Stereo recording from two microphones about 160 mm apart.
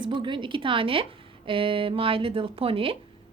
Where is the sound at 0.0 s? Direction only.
30° right (ahead or behind).